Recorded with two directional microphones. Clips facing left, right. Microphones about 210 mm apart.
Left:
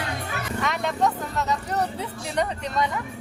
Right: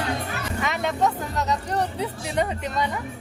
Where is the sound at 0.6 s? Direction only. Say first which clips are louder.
Right 1 dB; centre (ahead or behind).